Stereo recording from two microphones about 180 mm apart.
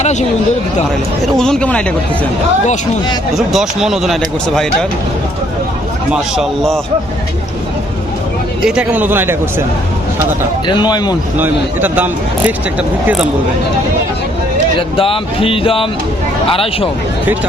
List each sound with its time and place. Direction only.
0.0 s speech: 40° left (ahead or behind)
1.4 s speech: 5° left (ahead or behind)
3.3 s speech: centre (ahead or behind)
6.3 s speech: centre (ahead or behind)
8.6 s speech: 5° right (ahead or behind)
10.7 s a man's voice: 25° left (ahead or behind)
11.3 s speech: 10° right (ahead or behind)
14.8 s speech: 30° left (ahead or behind)